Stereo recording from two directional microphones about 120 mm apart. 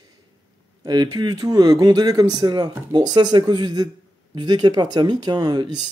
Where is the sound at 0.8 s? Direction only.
35° right (ahead or behind).